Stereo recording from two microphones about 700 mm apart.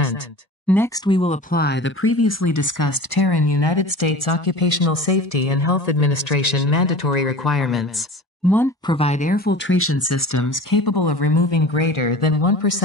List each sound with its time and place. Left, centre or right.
0.7 s speech: centre; by 7.3 s left
7.4 s speech: centre; by 12.8 s left